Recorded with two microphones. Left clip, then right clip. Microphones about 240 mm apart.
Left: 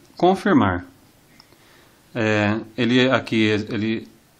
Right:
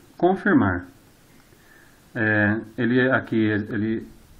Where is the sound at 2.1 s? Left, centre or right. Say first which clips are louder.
Left 1 dB; left.